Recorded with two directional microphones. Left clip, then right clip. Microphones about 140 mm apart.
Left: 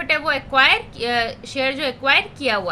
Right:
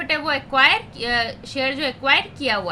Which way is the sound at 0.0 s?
20° left (ahead or behind).